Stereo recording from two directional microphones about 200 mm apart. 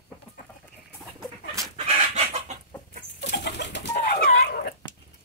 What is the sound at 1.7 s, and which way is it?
Chicken, 30° right (ahead or behind).